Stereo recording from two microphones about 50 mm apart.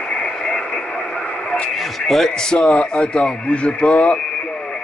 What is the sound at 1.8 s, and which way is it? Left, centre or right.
Speech, centre.